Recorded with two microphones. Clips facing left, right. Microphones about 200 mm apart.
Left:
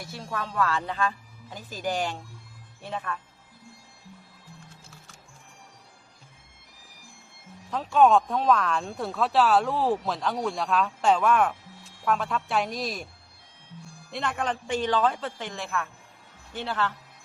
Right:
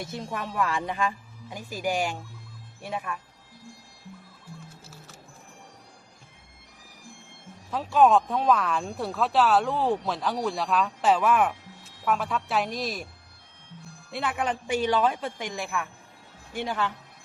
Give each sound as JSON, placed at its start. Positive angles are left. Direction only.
{"t": 0.0, "sound": "speech", "side_deg": -20}
{"t": 7.7, "sound": "speech", "side_deg": -5}
{"t": 14.1, "sound": "speech", "side_deg": -5}